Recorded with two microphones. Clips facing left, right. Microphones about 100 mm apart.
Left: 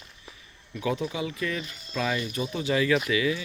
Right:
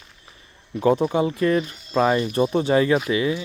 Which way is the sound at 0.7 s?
35° right (ahead or behind).